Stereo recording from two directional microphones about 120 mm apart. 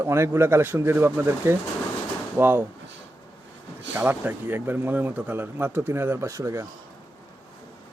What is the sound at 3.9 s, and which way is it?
A man's voice, 15° right (ahead or behind).